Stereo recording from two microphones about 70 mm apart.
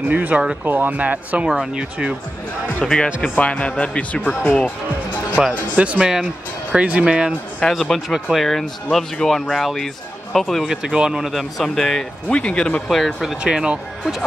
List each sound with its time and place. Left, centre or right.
0.1 s speech: centre
0.7 s speech: right
1.5 s speech: centre
2.8 s speech: centre
3.2 s speech: centre
5.4 s speech: centre
7.6 s speech: centre
10.6 s speech: centre
12.8 s speech: centre
13.4 s speech: centre